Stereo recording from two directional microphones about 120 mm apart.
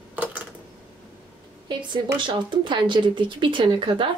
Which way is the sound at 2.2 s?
40° right (ahead or behind).